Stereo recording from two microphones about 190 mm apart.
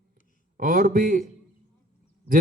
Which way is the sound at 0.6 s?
45° right (ahead or behind).